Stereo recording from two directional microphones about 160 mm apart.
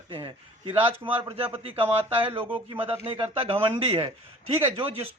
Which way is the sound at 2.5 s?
10° right (ahead or behind).